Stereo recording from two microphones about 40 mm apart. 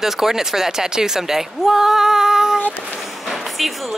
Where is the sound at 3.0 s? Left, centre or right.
Centre.